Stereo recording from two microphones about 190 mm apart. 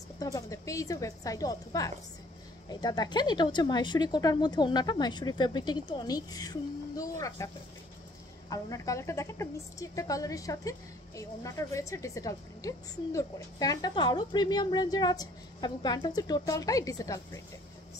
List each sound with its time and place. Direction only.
0.2 s a woman's voice: 15° left (ahead or behind)